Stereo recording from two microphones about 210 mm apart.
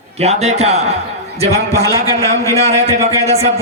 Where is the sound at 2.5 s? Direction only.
30° right (ahead or behind).